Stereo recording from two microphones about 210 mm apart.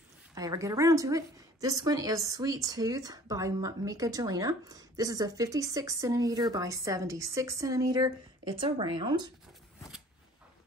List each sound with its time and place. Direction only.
0.3 s a woman's voice: 15° right (ahead or behind)